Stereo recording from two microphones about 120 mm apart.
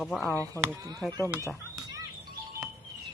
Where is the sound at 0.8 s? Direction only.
30° right (ahead or behind).